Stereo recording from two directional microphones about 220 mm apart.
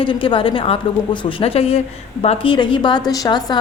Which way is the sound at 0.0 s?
25° left (ahead or behind).